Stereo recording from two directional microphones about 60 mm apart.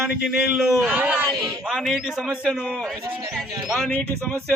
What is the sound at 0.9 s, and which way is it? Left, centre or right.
Speech, right.